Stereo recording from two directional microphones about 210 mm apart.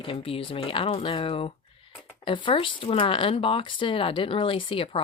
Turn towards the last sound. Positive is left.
turn(degrees=25)  # may be behind; listen again after turning